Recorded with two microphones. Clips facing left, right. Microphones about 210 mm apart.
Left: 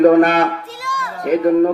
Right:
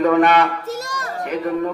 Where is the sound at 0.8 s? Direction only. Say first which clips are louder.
Left 2 dB; 40° right (ahead or behind).